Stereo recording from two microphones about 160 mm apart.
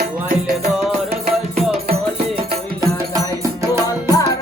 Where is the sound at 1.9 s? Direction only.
35° right (ahead or behind).